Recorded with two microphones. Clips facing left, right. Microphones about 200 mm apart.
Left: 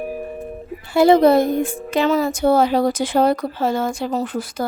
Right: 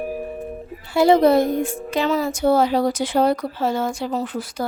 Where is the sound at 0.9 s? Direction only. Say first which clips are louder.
Left 2 dB; 50° left (ahead or behind).